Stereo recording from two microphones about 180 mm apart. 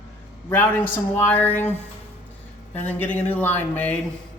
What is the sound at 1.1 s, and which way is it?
Speech, 10° left (ahead or behind).